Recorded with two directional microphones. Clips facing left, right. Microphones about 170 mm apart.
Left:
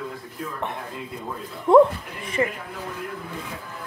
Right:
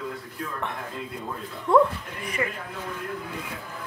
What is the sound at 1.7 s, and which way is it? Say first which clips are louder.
Speech: left 5 dB; 20° left (ahead or behind).